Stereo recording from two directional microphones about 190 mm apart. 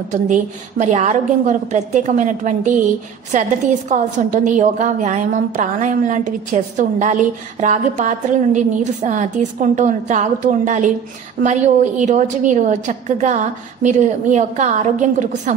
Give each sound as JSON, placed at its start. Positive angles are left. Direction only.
{"t": 0.1, "sound": "a woman's voice", "side_deg": -40}
{"t": 3.9, "sound": "a woman's voice", "side_deg": -40}